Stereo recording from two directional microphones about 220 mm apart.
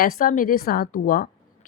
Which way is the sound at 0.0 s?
35° left (ahead or behind).